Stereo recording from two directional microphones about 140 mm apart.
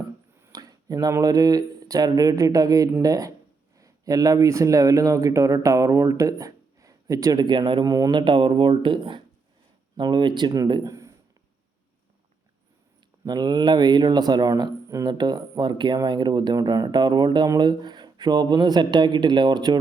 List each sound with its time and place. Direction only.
0.4 s speech: 25° right (ahead or behind)
13.2 s speech: 30° right (ahead or behind)